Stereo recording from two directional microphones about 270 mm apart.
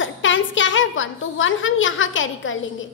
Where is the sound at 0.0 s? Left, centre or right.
Left.